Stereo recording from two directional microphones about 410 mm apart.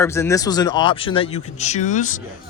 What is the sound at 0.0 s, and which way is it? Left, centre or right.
Speech, centre.